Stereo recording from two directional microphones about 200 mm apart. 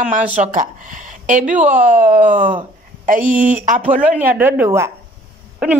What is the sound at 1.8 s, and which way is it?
Speech, 40° right (ahead or behind).